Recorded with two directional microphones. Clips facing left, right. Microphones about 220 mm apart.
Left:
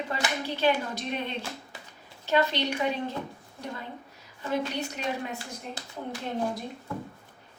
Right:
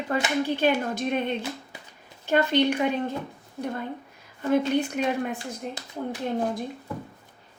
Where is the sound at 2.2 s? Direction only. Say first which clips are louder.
Right 4 dB; 50° right (ahead or behind).